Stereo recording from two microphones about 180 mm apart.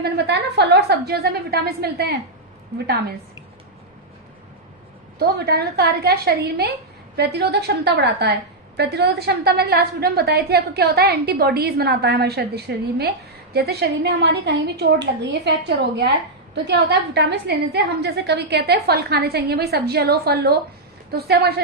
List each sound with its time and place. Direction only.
0.0 s a woman's voice: 65° right (ahead or behind)
5.2 s a woman's voice: 60° right (ahead or behind)